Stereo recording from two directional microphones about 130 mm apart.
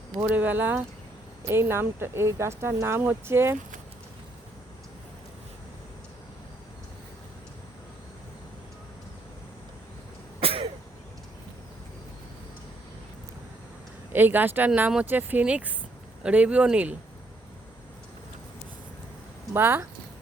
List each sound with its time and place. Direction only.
0.2 s speech: 15° right (ahead or behind)
10.4 s throat clearing: 45° right (ahead or behind)
14.1 s speech: 15° right (ahead or behind)
19.5 s speech: 20° right (ahead or behind)